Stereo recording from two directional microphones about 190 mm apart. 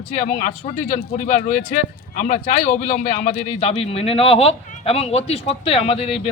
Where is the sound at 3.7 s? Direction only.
30° left (ahead or behind).